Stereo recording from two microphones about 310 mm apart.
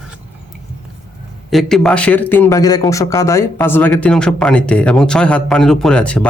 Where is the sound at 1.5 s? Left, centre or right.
Centre.